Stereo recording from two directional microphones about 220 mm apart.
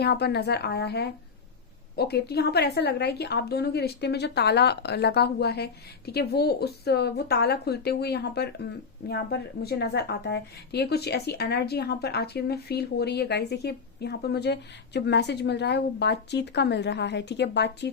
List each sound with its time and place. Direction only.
0.0 s speech: 50° left (ahead or behind)